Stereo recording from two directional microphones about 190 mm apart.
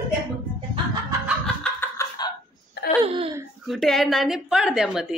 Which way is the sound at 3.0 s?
30° right (ahead or behind).